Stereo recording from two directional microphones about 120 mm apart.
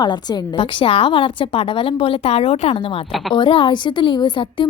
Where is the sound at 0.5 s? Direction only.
50° left (ahead or behind).